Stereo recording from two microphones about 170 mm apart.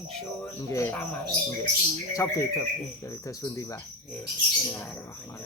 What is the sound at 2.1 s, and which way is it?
Cricket, 20° left (ahead or behind).